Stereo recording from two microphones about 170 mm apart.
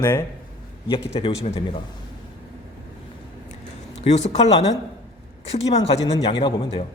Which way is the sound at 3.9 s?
40° left (ahead or behind).